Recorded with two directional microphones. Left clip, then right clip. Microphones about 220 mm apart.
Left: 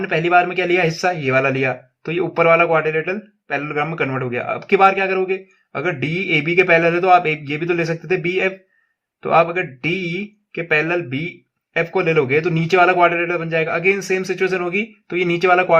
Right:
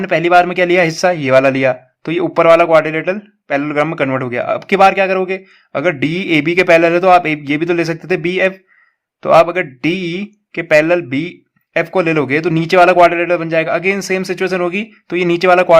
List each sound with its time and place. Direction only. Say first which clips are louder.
0.0 s a man's voice: right 5 dB; 40° right (ahead or behind)